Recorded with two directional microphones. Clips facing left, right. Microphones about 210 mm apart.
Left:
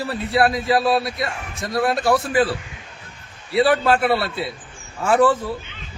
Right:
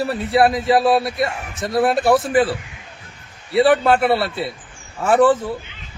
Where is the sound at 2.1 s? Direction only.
Centre (ahead or behind).